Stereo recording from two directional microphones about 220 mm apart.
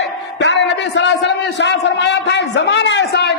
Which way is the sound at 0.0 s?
55° left (ahead or behind).